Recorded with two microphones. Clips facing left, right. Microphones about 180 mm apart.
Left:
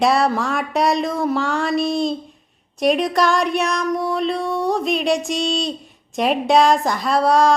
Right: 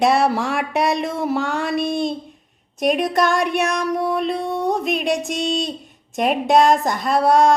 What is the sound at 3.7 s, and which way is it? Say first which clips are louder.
Speech: even; 10° right (ahead or behind).